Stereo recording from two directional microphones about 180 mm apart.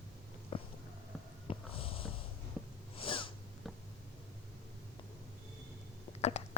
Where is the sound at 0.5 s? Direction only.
30° left (ahead or behind).